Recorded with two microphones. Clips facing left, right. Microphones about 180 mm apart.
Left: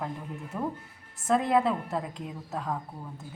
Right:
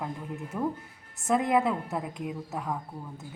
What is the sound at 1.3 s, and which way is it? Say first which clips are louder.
Speech: even; 15° right (ahead or behind).